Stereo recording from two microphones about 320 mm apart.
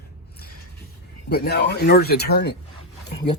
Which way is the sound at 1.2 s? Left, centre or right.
Left.